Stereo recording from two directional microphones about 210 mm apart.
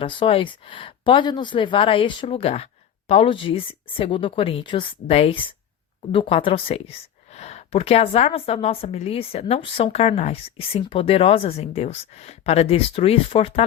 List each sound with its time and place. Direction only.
0.0 s a woman's voice: 25° left (ahead or behind)